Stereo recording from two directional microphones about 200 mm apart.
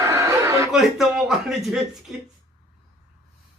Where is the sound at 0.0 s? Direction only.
15° right (ahead or behind).